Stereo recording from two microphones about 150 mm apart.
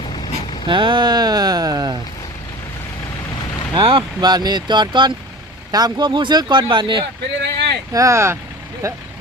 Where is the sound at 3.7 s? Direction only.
35° right (ahead or behind).